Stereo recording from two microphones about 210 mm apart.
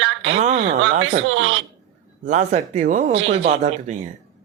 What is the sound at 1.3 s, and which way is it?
Speech, 70° right (ahead or behind).